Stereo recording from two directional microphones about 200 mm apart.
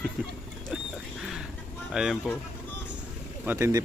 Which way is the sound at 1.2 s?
Centre (ahead or behind).